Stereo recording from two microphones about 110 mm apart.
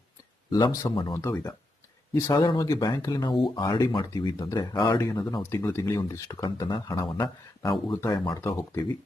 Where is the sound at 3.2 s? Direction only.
45° left (ahead or behind).